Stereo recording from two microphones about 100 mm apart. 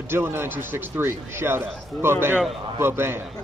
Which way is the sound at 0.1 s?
25° right (ahead or behind).